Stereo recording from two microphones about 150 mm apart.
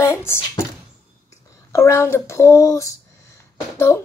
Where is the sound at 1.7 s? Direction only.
20° left (ahead or behind).